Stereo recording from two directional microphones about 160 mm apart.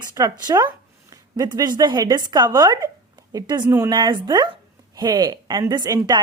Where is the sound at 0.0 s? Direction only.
25° right (ahead or behind).